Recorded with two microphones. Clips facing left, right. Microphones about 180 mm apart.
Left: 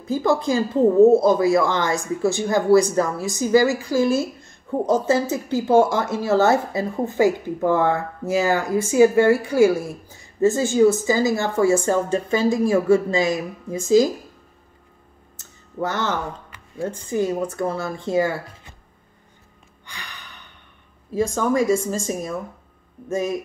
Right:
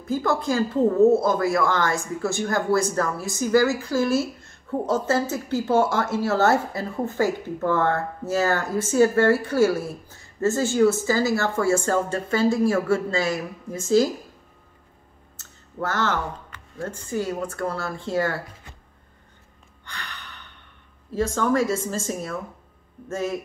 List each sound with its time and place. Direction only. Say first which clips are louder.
0.0 s speech: left 3 dB; 15° left (ahead or behind)
15.3 s a sound: left 4 dB; 15° left (ahead or behind)
16.4 s speech: left 5 dB; 10° left (ahead or behind)
19.9 s gasp: right 1 dB; 10° left (ahead or behind)
21.1 s speech: left 2 dB; 10° left (ahead or behind)